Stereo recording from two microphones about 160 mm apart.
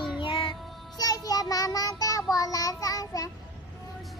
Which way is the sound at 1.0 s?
25° left (ahead or behind).